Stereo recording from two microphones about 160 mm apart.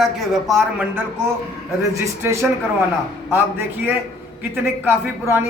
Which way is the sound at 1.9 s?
15° right (ahead or behind).